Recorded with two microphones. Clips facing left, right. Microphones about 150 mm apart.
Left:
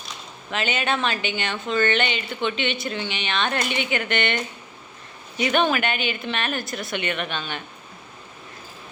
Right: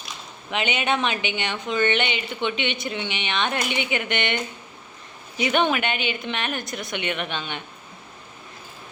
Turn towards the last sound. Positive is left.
turn(degrees=-20)  # may be behind; listen again after turning